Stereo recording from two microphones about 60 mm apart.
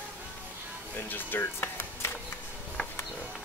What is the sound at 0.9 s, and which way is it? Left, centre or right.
Speech, left.